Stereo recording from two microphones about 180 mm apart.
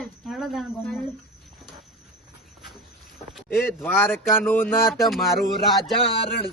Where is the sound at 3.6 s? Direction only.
10° left (ahead or behind).